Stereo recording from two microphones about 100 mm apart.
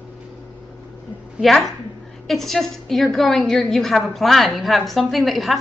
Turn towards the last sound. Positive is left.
turn(degrees=0)  # may be behind; listen again after turning